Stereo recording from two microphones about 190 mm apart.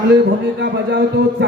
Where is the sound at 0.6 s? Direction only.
65° right (ahead or behind).